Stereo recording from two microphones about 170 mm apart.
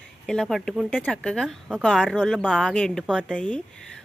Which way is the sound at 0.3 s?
Centre (ahead or behind).